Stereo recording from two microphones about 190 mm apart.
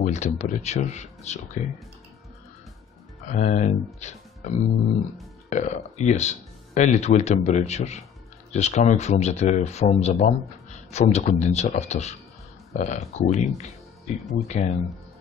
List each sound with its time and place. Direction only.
0.0 s speech: 35° left (ahead or behind)
3.3 s speech: 40° left (ahead or behind)